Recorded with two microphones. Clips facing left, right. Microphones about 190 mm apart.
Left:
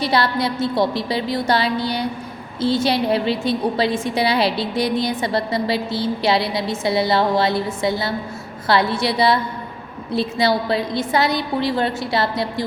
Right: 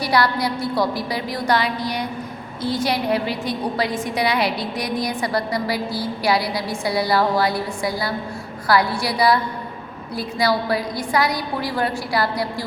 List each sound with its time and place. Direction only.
0.0 s a woman's voice: 25° left (ahead or behind)